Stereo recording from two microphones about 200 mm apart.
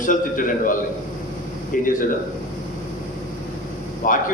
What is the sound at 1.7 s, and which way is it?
Speech, 45° left (ahead or behind).